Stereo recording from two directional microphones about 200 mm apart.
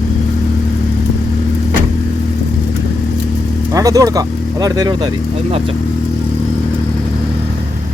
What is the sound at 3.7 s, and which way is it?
Speech, 15° right (ahead or behind).